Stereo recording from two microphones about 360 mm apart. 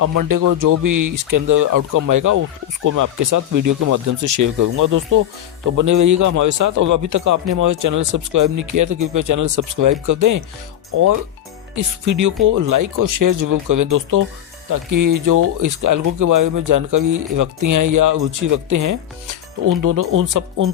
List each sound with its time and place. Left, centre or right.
0.0 s a man's voice: right
11.7 s speech: right